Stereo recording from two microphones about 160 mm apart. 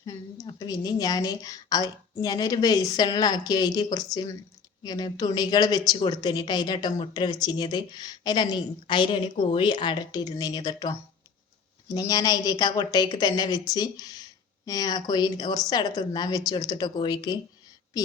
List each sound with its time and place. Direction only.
0.0 s speech: 25° left (ahead or behind)